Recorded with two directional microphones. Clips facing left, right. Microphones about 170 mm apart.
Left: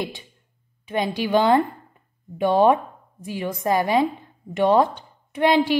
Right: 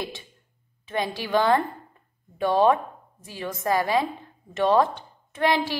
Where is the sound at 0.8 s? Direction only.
20° left (ahead or behind).